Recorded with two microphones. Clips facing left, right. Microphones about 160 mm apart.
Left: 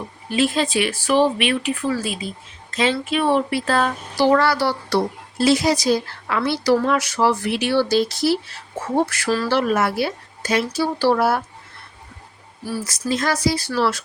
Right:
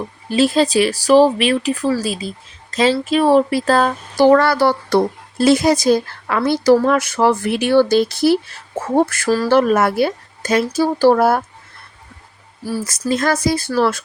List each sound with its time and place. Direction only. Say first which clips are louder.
0.3 s speech: right 5 dB; 35° right (ahead or behind)
12.6 s speech: right 4 dB; 45° right (ahead or behind)